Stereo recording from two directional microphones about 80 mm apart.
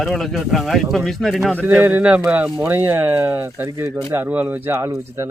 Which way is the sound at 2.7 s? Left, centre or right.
Right.